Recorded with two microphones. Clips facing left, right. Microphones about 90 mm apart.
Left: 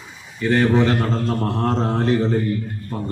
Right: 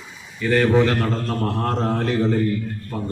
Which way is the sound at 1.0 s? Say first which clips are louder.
Left 1 dB; 20° left (ahead or behind).